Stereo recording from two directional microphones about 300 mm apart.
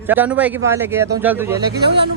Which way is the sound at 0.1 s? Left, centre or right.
Centre.